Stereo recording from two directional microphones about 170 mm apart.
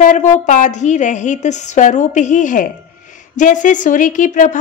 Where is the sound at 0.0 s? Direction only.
50° left (ahead or behind).